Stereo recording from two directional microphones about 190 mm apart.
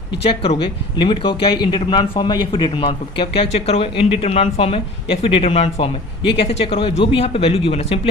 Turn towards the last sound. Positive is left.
turn(degrees=30)  # may be behind; listen again after turning